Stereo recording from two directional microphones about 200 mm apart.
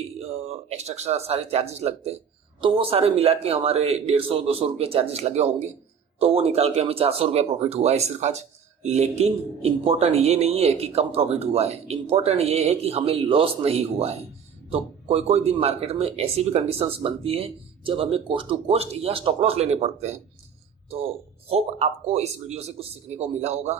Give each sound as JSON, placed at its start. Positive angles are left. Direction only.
{"t": 0.2, "sound": "speech", "side_deg": -30}
{"t": 21.5, "sound": "speech", "side_deg": -30}